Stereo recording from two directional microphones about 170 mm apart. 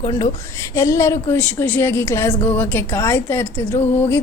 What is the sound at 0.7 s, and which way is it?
A woman's voice, 15° left (ahead or behind).